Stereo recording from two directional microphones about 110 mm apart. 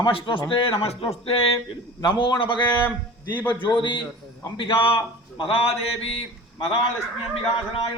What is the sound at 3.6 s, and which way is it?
A man's voice, 45° left (ahead or behind).